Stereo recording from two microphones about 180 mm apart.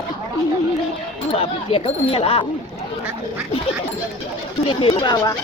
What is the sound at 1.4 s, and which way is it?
Speech, 30° left (ahead or behind).